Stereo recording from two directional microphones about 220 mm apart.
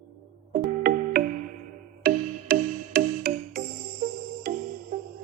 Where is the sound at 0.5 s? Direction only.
45° right (ahead or behind).